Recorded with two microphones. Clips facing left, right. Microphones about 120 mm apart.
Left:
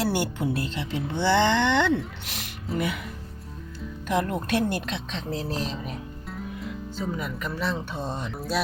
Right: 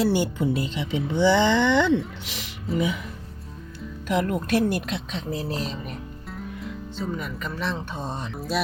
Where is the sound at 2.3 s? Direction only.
55° left (ahead or behind).